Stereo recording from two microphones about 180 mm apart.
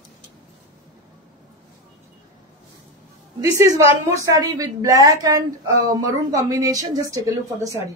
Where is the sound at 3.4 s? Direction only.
15° right (ahead or behind).